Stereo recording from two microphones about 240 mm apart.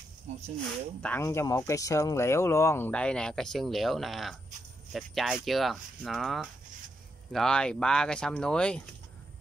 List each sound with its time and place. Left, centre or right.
0.3 s speech: right
1.0 s speech: centre